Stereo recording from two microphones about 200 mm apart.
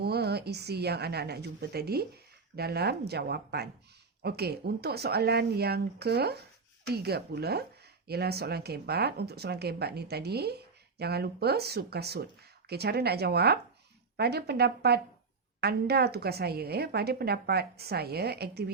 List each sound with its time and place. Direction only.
0.0 s speech: 55° right (ahead or behind)